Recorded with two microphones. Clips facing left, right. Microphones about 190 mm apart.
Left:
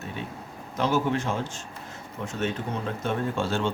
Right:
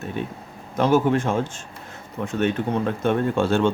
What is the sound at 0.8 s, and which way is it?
Speech, 50° right (ahead or behind).